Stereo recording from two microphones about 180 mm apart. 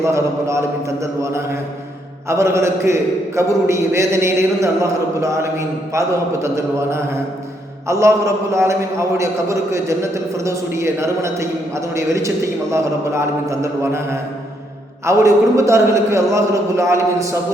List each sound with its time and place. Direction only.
0.0 s a man's voice: 15° right (ahead or behind)